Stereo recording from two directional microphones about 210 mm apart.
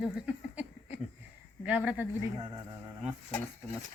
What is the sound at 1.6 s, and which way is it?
Speech, 10° right (ahead or behind).